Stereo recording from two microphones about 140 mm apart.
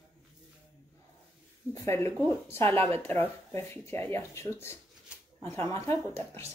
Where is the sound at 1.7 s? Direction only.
20° left (ahead or behind).